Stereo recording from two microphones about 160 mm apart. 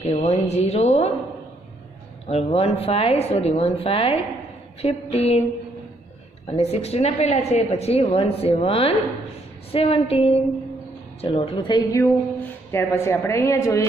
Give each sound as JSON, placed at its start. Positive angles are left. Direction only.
{"t": 0.0, "sound": "speech", "side_deg": 45}
{"t": 2.2, "sound": "a woman's voice", "side_deg": 40}
{"t": 6.4, "sound": "a woman's voice", "side_deg": 40}